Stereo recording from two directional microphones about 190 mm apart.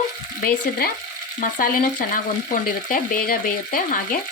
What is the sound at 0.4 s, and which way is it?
Frying, 55° left (ahead or behind).